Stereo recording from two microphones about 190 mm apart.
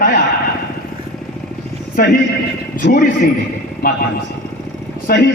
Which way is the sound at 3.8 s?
50° left (ahead or behind).